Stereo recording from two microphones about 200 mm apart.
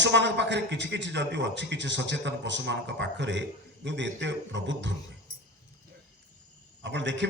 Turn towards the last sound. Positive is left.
turn(degrees=-65)  # may be behind; listen again after turning